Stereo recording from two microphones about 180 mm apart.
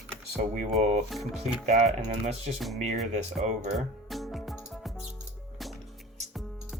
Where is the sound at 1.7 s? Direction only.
40° right (ahead or behind).